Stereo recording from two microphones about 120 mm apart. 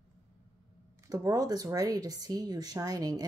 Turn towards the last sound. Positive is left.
turn(degrees=-30)  # may be behind; listen again after turning